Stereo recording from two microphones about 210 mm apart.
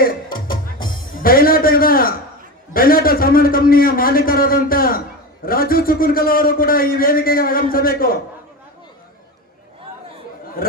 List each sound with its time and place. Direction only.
0.4 s music: 20° left (ahead or behind)
1.1 s a sound: 45° left (ahead or behind)
2.7 s a man's voice: 45° left (ahead or behind)